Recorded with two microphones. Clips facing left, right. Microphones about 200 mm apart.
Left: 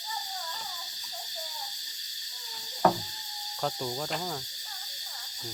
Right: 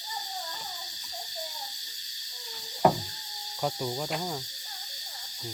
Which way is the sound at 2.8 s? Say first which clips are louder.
Right 2 dB; 15° right (ahead or behind).